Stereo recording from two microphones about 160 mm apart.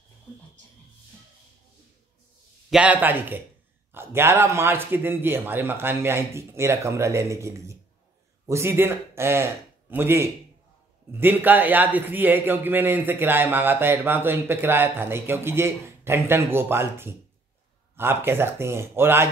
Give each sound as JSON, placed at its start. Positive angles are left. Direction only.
{"t": 2.7, "sound": "a man's voice", "side_deg": -10}